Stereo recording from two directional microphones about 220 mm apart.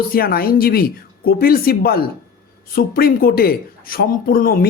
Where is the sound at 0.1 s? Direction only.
45° left (ahead or behind).